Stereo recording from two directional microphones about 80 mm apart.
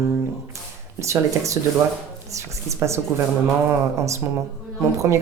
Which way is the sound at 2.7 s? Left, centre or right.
Right.